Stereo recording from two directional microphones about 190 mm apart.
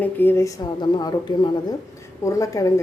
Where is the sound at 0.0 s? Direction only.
10° left (ahead or behind).